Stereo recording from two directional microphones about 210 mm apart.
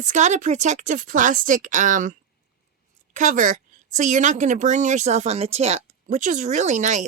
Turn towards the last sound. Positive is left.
turn(degrees=-35)  # may be behind; listen again after turning